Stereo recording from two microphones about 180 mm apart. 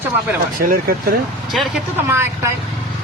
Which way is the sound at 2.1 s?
15° right (ahead or behind).